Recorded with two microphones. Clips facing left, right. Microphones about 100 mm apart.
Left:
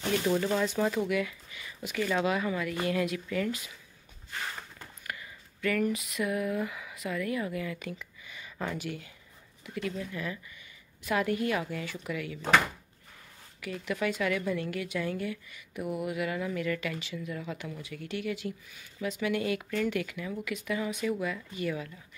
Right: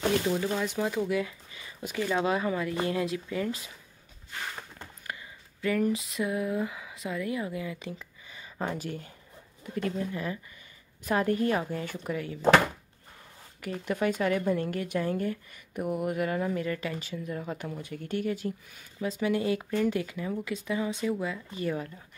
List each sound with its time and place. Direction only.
0.6 s speech: 5° right (ahead or behind)
0.9 s a sound: 30° right (ahead or behind)
2.0 s speech: 20° right (ahead or behind)
4.7 s a sound: 25° right (ahead or behind); by 9.1 s 40° right (ahead or behind)
9.6 s a woman's voice: 40° right (ahead or behind)
13.6 s a woman's voice: 40° right (ahead or behind)